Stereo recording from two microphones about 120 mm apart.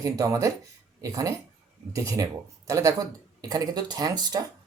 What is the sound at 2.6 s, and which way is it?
Speech, 25° right (ahead or behind).